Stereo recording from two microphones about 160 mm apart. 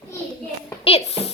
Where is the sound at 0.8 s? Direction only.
40° left (ahead or behind).